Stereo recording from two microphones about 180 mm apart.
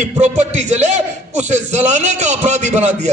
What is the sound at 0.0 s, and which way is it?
Speech, 40° right (ahead or behind).